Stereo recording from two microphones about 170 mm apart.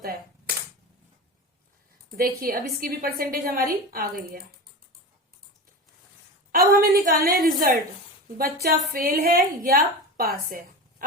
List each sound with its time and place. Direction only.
0.0 s cap gun: 60° right (ahead or behind)
2.0 s a woman's voice: 60° right (ahead or behind)
6.5 s a woman's voice: 55° right (ahead or behind)
8.9 s a woman's voice: 60° right (ahead or behind)